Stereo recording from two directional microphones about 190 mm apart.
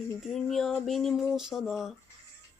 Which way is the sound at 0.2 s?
Centre (ahead or behind).